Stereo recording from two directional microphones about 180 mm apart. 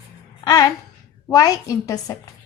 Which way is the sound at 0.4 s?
20° left (ahead or behind).